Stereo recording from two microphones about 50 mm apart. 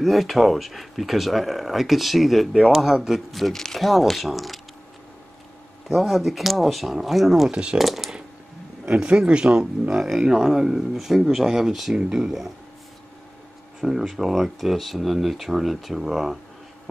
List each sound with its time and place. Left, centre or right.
0.0 s speech: centre
5.9 s speech: centre
8.9 s speech: right; by 12.0 s centre
12.0 s speech: centre
13.7 s speech: centre